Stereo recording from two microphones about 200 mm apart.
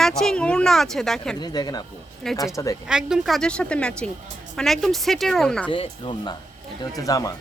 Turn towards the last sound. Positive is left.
turn(degrees=15)  # may be behind; listen again after turning